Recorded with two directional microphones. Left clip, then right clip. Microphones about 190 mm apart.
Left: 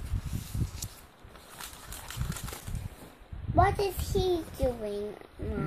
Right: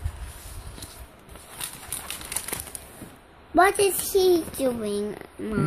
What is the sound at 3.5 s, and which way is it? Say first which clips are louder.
A child's voice: right 7 dB; 55° right (ahead or behind).